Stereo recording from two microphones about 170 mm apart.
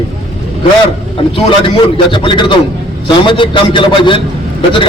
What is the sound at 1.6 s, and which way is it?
A man's voice, 30° left (ahead or behind).